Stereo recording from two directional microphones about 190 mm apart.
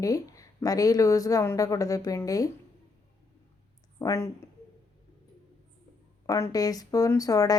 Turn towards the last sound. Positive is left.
turn(degrees=20)  # may be behind; listen again after turning